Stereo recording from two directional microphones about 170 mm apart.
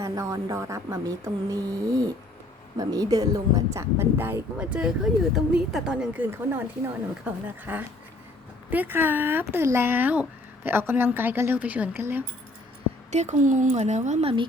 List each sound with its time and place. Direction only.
0.0 s speech: 20° right (ahead or behind)
13.1 s speech: 45° right (ahead or behind)